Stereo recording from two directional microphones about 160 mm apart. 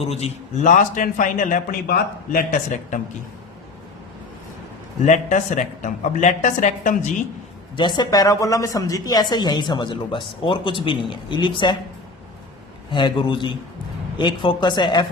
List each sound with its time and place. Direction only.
0.0 s a man's voice: 40° left (ahead or behind); by 3.0 s 60° left (ahead or behind)
5.0 s a woman's voice: 50° left (ahead or behind)
7.8 s speech: 30° left (ahead or behind)
12.9 s speech: 30° left (ahead or behind)